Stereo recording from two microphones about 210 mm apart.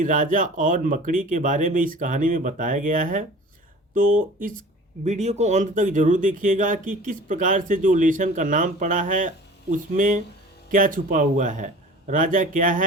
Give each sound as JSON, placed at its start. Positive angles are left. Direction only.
{"t": 0.0, "sound": "speech", "side_deg": -40}